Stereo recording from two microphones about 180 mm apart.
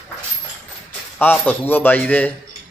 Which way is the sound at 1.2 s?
10° left (ahead or behind).